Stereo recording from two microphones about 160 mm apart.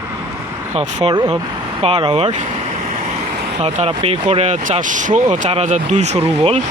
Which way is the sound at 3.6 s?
40° right (ahead or behind).